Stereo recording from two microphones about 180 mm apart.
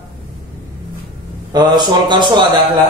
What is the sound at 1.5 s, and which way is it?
Speech, 20° right (ahead or behind).